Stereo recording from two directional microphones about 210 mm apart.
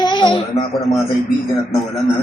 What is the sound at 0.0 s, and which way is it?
Speech, 20° left (ahead or behind).